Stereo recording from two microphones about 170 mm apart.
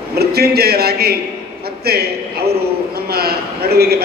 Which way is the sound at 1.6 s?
65° right (ahead or behind).